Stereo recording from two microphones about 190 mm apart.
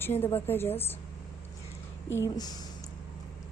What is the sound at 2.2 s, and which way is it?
Speech, 20° left (ahead or behind).